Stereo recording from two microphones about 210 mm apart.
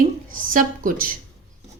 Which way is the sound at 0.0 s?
40° right (ahead or behind).